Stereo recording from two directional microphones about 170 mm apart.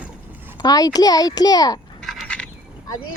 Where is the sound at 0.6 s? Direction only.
25° left (ahead or behind).